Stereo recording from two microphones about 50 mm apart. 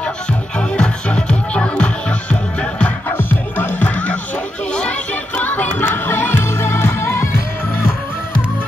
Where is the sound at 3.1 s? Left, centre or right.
Left.